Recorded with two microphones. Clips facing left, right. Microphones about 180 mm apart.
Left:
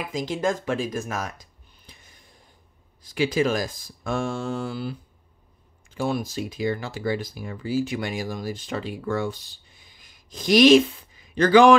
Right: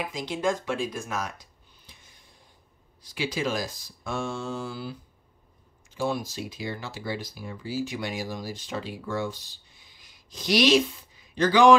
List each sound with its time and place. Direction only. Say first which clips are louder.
0.1 s speech: left 6 dB; 45° left (ahead or behind)
3.1 s speech: left 6 dB; 50° left (ahead or behind)
6.0 s speech: left 3 dB; 55° left (ahead or behind)